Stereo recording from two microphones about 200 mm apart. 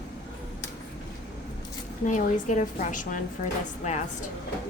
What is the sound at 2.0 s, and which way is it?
A woman's voice, 40° left (ahead or behind).